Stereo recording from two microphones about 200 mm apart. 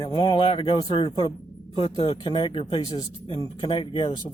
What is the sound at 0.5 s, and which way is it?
Speech, 25° left (ahead or behind).